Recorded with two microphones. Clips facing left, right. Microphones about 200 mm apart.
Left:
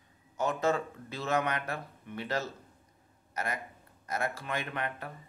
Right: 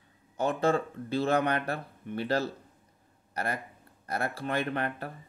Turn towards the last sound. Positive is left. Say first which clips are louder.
# right 5 dB
turn(degrees=-35)  # may be behind; listen again after turning